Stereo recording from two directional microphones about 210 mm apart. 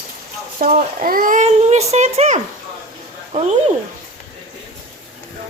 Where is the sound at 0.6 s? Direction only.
45° right (ahead or behind).